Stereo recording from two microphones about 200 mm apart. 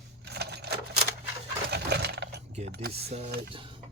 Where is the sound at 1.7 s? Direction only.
55° right (ahead or behind).